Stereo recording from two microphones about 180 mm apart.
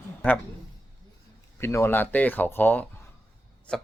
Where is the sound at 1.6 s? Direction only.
15° left (ahead or behind).